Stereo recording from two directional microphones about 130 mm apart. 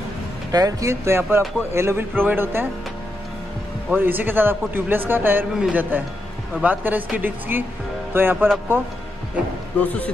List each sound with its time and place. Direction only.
0.5 s a man's voice: 30° right (ahead or behind)
3.9 s a man's voice: 15° right (ahead or behind)
9.8 s speech: 10° left (ahead or behind)